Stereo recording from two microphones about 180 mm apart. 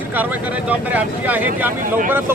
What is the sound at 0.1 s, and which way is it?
Speech, 10° right (ahead or behind).